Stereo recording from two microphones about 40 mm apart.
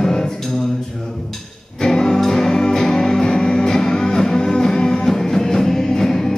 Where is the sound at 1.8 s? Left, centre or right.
Centre.